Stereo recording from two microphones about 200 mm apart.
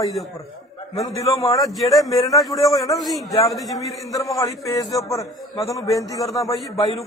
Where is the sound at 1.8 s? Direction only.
Centre (ahead or behind).